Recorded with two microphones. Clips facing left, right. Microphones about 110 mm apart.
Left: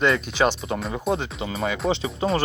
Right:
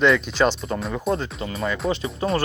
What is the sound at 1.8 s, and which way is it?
Speech, 30° left (ahead or behind).